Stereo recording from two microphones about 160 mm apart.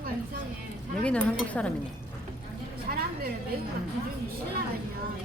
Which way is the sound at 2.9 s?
70° right (ahead or behind).